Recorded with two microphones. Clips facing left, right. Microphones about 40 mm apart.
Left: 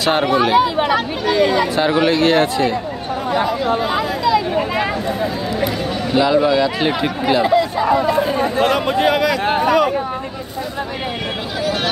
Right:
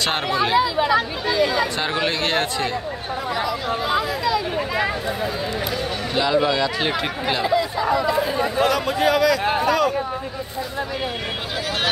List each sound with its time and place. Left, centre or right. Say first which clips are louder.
0.6 s speech: left 3 dB; left
2.0 s speech: left 7 dB; centre
6.1 s speech: left 5 dB; centre
7.4 s speech: left 5 dB; left